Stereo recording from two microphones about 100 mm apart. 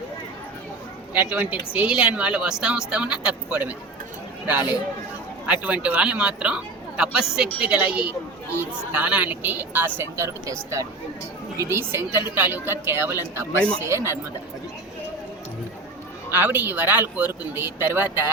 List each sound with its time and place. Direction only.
1.1 s speech: 15° right (ahead or behind)
16.3 s speech: 20° right (ahead or behind)